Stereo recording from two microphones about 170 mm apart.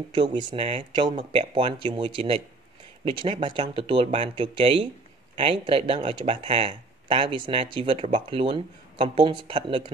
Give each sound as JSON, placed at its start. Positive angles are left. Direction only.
{"t": 0.1, "sound": "speech", "side_deg": -30}